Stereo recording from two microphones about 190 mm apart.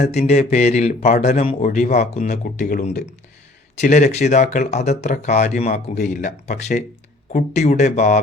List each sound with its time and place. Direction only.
0.0 s speech: 35° left (ahead or behind)
2.3 s speech: 50° left (ahead or behind)
3.8 s speech: 40° left (ahead or behind)